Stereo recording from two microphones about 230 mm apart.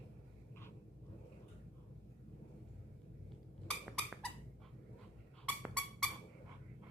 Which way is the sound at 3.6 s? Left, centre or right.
Centre.